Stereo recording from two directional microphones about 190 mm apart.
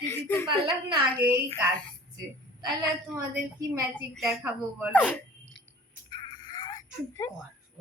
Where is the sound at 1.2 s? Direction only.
10° right (ahead or behind).